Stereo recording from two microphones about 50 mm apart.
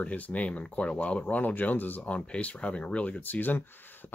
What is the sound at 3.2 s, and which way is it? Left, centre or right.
Speech, left.